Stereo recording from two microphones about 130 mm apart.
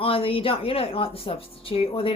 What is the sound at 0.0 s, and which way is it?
A woman's voice, 45° left (ahead or behind).